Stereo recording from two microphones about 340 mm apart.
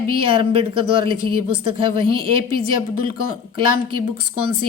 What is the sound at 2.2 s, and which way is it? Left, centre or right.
Speech, right.